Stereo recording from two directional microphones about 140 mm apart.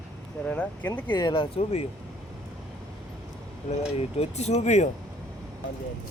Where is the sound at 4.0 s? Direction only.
50° left (ahead or behind).